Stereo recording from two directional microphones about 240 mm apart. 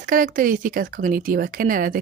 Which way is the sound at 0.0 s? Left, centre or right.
Right.